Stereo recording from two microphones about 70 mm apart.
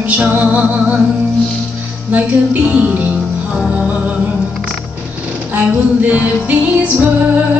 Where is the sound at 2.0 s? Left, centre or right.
Right.